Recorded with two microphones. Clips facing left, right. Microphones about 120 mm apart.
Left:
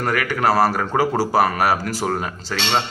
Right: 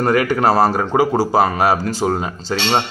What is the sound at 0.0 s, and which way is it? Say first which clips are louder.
Speech: right 5 dB; 30° right (ahead or behind).